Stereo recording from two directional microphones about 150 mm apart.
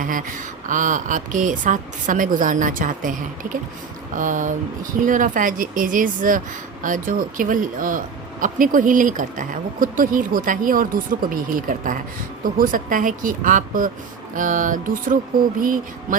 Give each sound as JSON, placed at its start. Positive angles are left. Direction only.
{"t": 0.0, "sound": "speech", "side_deg": -60}